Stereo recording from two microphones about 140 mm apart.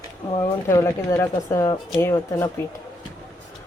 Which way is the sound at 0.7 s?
20° left (ahead or behind).